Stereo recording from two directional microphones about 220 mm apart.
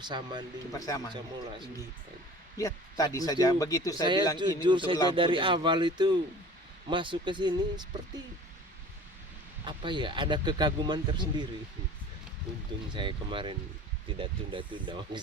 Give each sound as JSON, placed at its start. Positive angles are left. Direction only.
{"t": 0.0, "sound": "speech", "side_deg": -20}
{"t": 0.7, "sound": "speech", "side_deg": 15}
{"t": 2.6, "sound": "speech", "side_deg": 15}
{"t": 4.4, "sound": "speech", "side_deg": -20}
{"t": 9.6, "sound": "speech", "side_deg": -20}
{"t": 12.9, "sound": "speech", "side_deg": -20}